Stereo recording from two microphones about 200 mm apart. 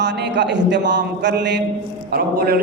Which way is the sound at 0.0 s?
60° right (ahead or behind).